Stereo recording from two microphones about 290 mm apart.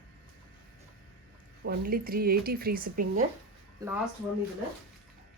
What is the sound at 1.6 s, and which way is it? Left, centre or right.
Speech, right.